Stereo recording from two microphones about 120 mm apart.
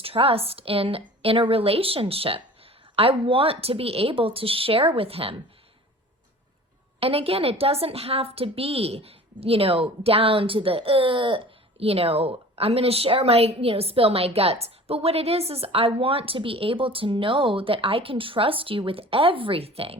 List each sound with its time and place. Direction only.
0.0 s a woman's voice: 50° right (ahead or behind)
7.0 s a woman's voice: 50° right (ahead or behind)